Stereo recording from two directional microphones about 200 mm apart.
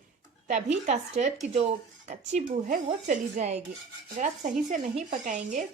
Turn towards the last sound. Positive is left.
turn(degrees=-40)  # may be behind; listen again after turning